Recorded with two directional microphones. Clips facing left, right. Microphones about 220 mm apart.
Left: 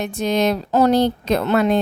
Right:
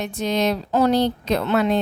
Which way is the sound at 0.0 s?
50° left (ahead or behind).